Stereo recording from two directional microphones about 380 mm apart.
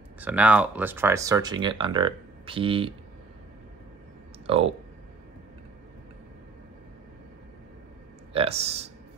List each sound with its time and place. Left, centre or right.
0.2 s speech: centre
4.5 s speech: centre
8.3 s speech: centre